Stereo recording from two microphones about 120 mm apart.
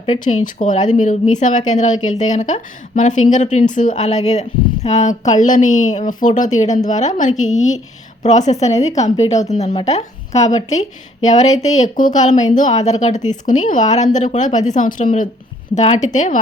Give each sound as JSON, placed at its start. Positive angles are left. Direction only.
{"t": 0.3, "sound": "a woman's voice", "side_deg": 90}
{"t": 13.5, "sound": "a woman's voice", "side_deg": 90}
{"t": 15.7, "sound": "speech", "side_deg": 75}